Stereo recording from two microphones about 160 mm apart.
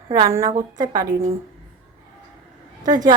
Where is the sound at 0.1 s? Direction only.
20° right (ahead or behind).